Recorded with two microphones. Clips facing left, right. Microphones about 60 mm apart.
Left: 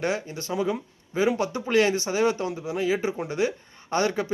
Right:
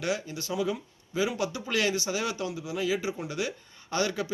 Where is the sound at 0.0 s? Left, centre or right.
Left.